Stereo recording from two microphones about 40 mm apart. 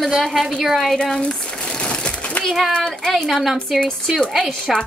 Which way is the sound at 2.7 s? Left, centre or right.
Centre.